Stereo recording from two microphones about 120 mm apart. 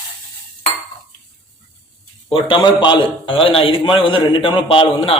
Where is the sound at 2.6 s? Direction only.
40° left (ahead or behind).